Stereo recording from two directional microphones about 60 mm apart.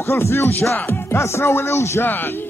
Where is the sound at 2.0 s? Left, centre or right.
Left.